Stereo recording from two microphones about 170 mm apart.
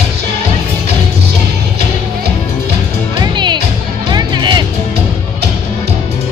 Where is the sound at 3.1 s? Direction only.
25° right (ahead or behind).